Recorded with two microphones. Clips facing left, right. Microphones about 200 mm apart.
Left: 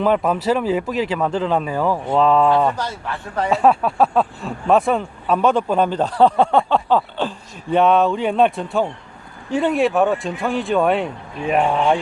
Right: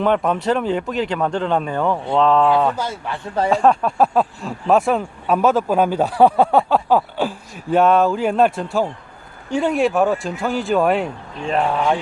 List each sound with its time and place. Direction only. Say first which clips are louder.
0.0 s speech: even; 5° left (ahead or behind)
2.7 s a man's voice: right 1 dB; 10° right (ahead or behind)
3.5 s speech: left 1 dB; 5° left (ahead or behind)
11.7 s speech: left 2 dB; 15° left (ahead or behind)